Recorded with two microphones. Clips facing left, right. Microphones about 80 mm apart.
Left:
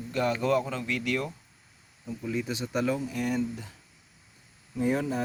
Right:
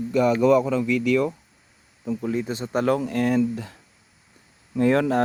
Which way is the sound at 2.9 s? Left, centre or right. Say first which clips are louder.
Right 8 dB; right.